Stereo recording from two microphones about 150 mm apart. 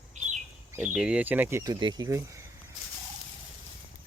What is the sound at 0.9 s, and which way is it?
Speech, 5° right (ahead or behind).